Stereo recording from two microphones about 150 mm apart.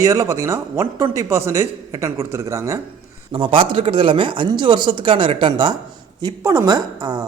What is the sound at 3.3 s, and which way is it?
A man's voice, 35° right (ahead or behind).